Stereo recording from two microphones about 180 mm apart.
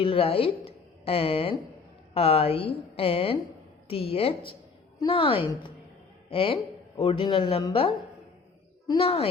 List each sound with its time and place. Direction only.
0.0 s a woman's voice: 30° left (ahead or behind)